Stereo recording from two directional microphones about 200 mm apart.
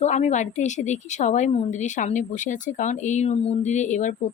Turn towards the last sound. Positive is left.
turn(degrees=40)  # may be behind; listen again after turning